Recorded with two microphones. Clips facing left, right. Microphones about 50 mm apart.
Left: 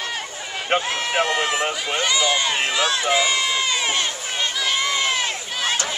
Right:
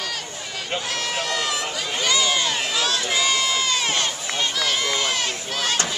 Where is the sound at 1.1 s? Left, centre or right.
Left.